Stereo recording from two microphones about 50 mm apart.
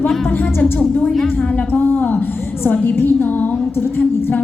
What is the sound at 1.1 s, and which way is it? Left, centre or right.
Speech, centre.